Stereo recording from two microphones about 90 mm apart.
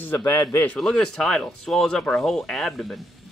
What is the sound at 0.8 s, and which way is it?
Speech, 5° left (ahead or behind).